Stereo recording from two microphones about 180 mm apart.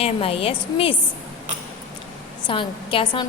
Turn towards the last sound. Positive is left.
turn(degrees=30)  # may be behind; listen again after turning